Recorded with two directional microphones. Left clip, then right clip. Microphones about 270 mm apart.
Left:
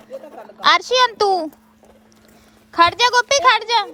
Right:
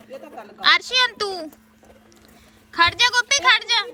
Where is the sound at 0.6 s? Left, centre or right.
Left.